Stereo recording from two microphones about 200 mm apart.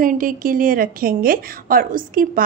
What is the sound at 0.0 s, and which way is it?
A woman's voice, 45° right (ahead or behind).